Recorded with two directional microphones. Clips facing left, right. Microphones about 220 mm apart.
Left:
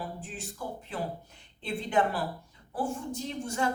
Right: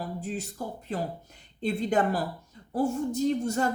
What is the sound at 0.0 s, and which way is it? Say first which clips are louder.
A woman's voice: right 6 dB; 40° right (ahead or behind).